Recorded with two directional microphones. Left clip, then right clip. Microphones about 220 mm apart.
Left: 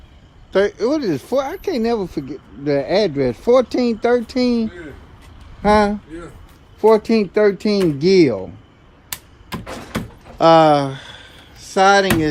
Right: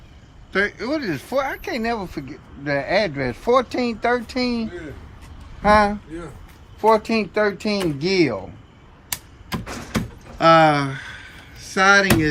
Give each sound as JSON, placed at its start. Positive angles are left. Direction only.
{"t": 0.5, "sound": "speech", "side_deg": 15}
{"t": 6.9, "sound": "speech", "side_deg": 40}
{"t": 10.3, "sound": "a sound", "side_deg": 15}